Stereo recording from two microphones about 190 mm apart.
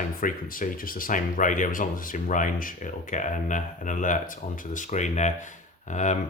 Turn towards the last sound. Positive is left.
turn(degrees=40)  # may be behind; listen again after turning